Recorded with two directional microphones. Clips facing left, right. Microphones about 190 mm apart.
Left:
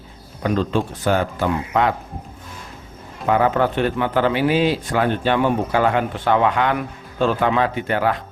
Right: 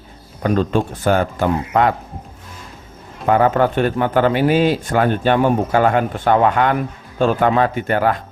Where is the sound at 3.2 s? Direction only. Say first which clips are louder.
Right 3 dB; 45° right (ahead or behind).